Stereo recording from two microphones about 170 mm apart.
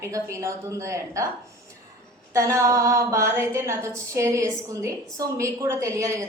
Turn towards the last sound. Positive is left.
turn(degrees=-20)  # may be behind; listen again after turning